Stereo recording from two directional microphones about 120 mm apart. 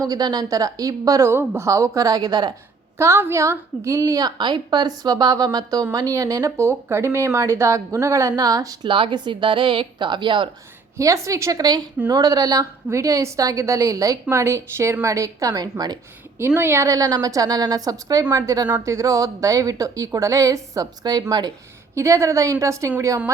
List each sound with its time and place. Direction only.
0.0 s speech: 35° right (ahead or behind)
3.0 s a woman's voice: 20° right (ahead or behind); by 10.5 s 40° right (ahead or behind)
10.9 s speech: 25° right (ahead or behind)